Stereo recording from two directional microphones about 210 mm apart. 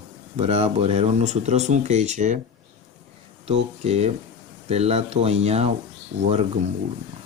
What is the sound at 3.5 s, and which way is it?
Speech, 30° right (ahead or behind).